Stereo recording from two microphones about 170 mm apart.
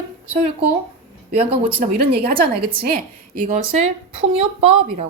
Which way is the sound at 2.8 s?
60° right (ahead or behind).